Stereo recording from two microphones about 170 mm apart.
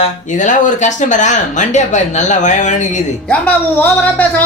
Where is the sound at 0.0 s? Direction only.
45° left (ahead or behind).